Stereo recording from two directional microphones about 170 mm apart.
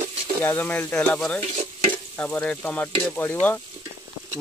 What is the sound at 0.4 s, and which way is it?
Speech, 15° left (ahead or behind).